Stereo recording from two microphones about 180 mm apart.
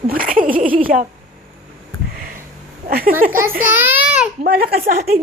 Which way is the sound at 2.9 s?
60° right (ahead or behind).